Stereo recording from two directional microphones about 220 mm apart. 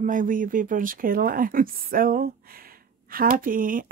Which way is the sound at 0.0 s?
35° right (ahead or behind).